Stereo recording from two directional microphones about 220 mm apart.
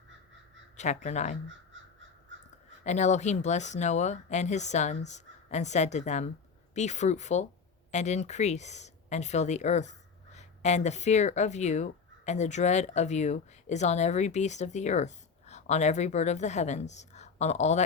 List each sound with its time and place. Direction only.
0.8 s speech: 30° left (ahead or behind)
1.7 s crow: 60° right (ahead or behind)
2.8 s speech: 30° left (ahead or behind)